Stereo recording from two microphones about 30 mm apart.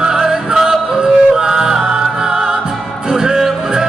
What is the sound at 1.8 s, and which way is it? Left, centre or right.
Music, right.